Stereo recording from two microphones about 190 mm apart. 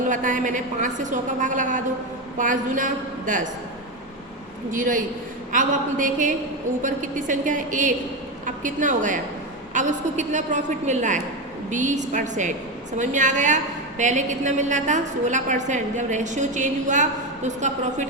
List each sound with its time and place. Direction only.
0.1 s a woman's voice: 45° right (ahead or behind)
4.7 s a woman's voice: 45° right (ahead or behind)